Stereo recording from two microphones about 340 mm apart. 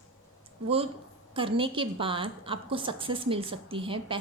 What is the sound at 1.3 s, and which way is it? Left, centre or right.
A woman's voice, centre.